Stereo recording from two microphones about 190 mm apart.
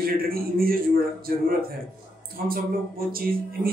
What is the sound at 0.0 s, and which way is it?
Speech, 50° right (ahead or behind).